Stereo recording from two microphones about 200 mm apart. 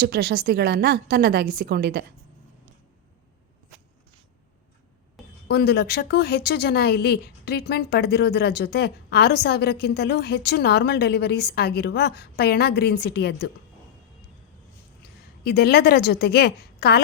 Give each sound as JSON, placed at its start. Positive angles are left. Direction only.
{"t": 0.0, "sound": "a woman's voice", "side_deg": -50}
{"t": 5.5, "sound": "speech", "side_deg": 55}
{"t": 15.4, "sound": "a woman's voice", "side_deg": 50}